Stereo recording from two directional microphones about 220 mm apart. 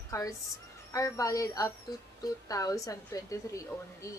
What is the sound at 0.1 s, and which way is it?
A woman's voice, 15° left (ahead or behind).